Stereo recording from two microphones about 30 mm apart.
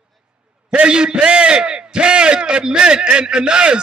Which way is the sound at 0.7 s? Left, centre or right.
Right.